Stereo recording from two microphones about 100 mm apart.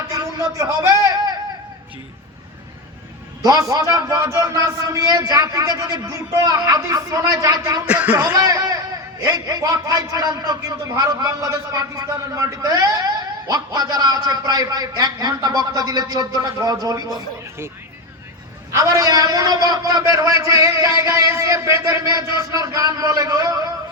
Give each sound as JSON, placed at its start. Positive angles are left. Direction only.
{"t": 0.1, "sound": "a sound", "side_deg": -35}
{"t": 3.4, "sound": "a man's voice", "side_deg": -35}
{"t": 7.9, "sound": "speech", "side_deg": -15}
{"t": 8.1, "sound": "a man's voice", "side_deg": -35}
{"t": 18.7, "sound": "a man's voice", "side_deg": -35}